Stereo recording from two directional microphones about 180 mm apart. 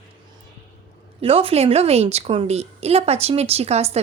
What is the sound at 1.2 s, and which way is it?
A woman's voice, 30° right (ahead or behind).